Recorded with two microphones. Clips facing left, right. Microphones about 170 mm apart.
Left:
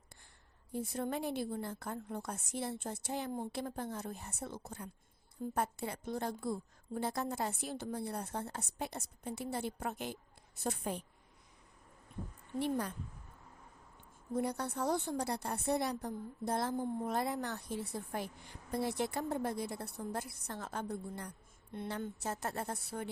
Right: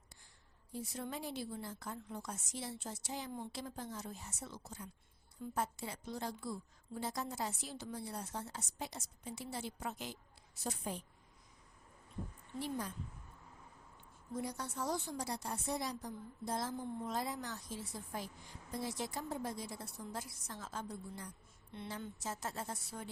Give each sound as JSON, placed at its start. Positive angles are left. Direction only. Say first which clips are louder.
{"t": 0.7, "sound": "a woman's voice", "louder": "left 6 dB", "side_deg": 55}
{"t": 12.5, "sound": "a woman's voice", "louder": "left 6 dB", "side_deg": 60}
{"t": 14.3, "sound": "a woman's voice", "louder": "left 6 dB", "side_deg": 60}